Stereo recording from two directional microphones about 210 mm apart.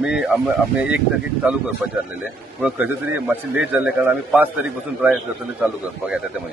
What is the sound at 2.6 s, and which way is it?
Speech, 5° right (ahead or behind).